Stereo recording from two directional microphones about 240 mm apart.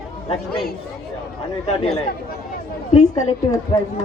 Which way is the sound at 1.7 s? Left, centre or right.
Left.